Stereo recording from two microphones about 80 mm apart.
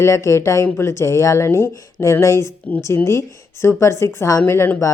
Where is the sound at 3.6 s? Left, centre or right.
Left.